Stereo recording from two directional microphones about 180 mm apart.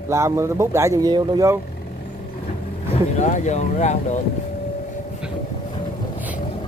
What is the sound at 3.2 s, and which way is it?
Speech, 40° left (ahead or behind).